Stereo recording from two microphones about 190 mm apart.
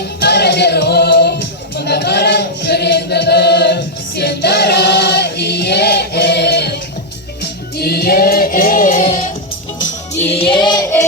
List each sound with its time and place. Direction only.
0.2 s music: 60° left (ahead or behind)
1.7 s chant: 60° left (ahead or behind)
7.4 s music: 55° left (ahead or behind)
10.2 s child singing: 30° left (ahead or behind)